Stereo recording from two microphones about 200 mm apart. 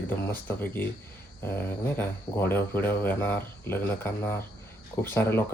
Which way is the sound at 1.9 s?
10° left (ahead or behind).